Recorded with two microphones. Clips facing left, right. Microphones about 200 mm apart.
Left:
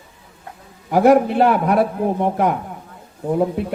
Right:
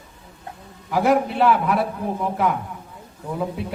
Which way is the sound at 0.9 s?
50° left (ahead or behind).